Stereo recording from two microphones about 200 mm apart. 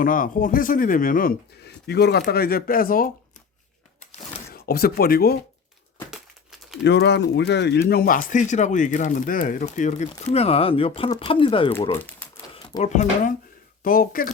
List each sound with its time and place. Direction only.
0.0 s speech: 45° left (ahead or behind)
4.5 s speech: 50° left (ahead or behind)
6.8 s speech: 60° left (ahead or behind); by 11.7 s 25° left (ahead or behind)
11.9 s speech: 10° left (ahead or behind)
12.5 s speech: 30° left (ahead or behind); by 14.3 s 45° left (ahead or behind)